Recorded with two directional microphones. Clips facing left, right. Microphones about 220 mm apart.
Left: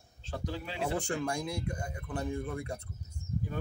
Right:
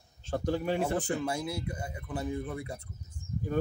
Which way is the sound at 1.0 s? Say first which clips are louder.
Right 2 dB; 5° right (ahead or behind).